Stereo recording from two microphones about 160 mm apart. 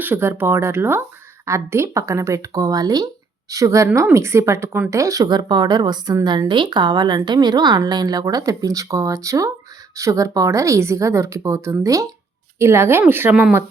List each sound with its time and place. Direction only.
0.0 s speech: 15° right (ahead or behind)